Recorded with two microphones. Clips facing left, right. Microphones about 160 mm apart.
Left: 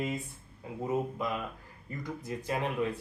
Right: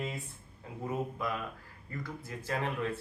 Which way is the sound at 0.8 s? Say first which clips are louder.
Left 3 dB; 20° left (ahead or behind).